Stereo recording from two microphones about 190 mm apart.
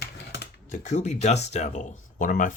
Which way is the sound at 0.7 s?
40° left (ahead or behind).